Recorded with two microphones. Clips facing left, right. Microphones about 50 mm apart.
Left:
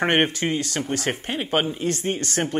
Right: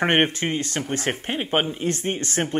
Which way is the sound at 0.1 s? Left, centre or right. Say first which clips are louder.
Even; right.